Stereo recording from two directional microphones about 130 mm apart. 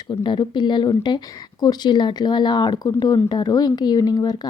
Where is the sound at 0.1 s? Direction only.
35° left (ahead or behind).